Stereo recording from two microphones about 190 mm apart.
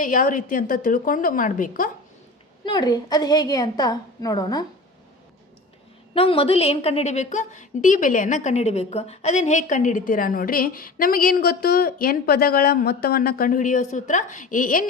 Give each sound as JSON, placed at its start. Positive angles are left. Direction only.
{"t": 0.0, "sound": "a woman's voice", "side_deg": 45}
{"t": 2.6, "sound": "a woman's voice", "side_deg": 20}
{"t": 6.1, "sound": "a woman's voice", "side_deg": 30}